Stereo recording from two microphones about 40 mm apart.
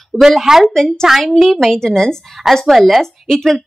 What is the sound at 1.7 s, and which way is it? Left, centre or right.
Speech, centre.